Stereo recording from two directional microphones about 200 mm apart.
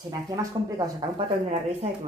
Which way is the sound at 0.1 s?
15° right (ahead or behind).